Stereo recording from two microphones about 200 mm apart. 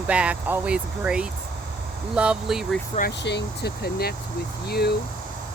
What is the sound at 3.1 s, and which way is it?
Speech, 60° left (ahead or behind).